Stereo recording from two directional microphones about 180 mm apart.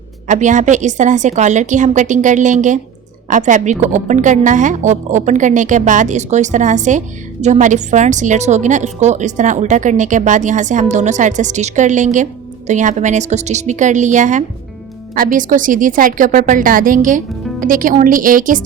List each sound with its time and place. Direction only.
0.3 s a woman's voice: 45° right (ahead or behind)